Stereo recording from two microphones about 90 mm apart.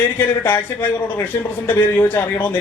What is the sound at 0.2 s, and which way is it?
A man's voice, 20° left (ahead or behind).